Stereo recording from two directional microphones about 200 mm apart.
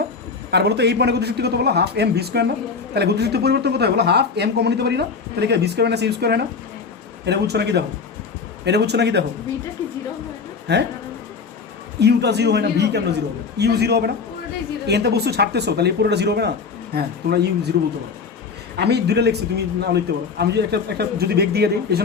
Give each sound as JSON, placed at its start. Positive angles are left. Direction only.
{"t": 0.5, "sound": "speech", "side_deg": -55}
{"t": 10.7, "sound": "speech", "side_deg": -55}
{"t": 11.9, "sound": "speech", "side_deg": -55}
{"t": 18.8, "sound": "speech", "side_deg": -55}